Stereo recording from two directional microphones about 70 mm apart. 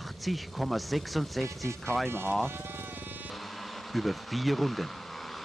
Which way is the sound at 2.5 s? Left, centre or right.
Right.